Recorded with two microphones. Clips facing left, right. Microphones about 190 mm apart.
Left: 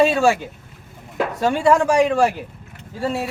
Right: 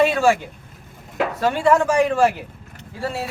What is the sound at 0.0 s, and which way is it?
Speech, 15° left (ahead or behind).